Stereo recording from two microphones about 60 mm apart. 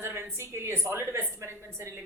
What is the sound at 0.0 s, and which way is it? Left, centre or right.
A woman's voice, right.